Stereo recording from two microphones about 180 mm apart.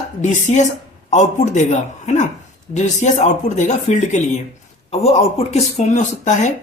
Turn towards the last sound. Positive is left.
turn(degrees=40)  # may be behind; listen again after turning